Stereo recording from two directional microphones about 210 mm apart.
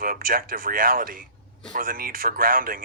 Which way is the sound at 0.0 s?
45° right (ahead or behind).